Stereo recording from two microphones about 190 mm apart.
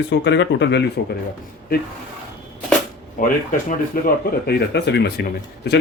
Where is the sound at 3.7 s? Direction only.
55° left (ahead or behind).